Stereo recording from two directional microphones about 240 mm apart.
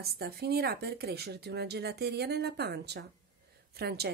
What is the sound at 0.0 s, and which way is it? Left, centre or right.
A woman's voice, right.